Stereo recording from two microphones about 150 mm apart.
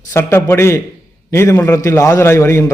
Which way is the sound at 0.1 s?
15° left (ahead or behind).